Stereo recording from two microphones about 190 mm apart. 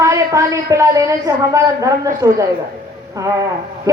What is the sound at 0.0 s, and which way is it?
Speech, 15° right (ahead or behind).